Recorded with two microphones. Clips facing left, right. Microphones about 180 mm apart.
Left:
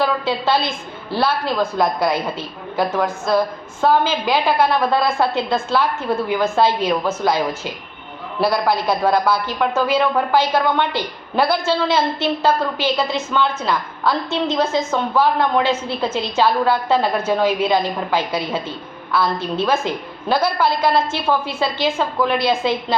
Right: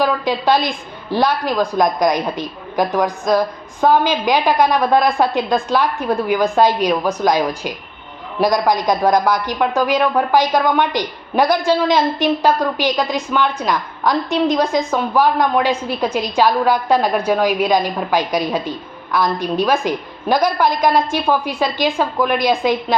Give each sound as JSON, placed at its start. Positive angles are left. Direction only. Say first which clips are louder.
{"t": 0.0, "sound": "a man's voice", "louder": "right 2 dB", "side_deg": -15}